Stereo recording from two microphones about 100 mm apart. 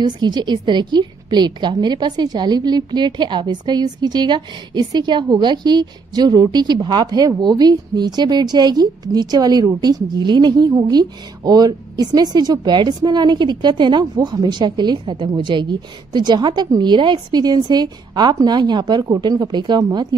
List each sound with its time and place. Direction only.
0.0 s a woman's voice: 45° right (ahead or behind)